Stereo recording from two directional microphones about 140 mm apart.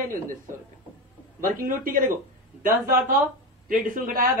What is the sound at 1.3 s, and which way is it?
Speech, 75° right (ahead or behind).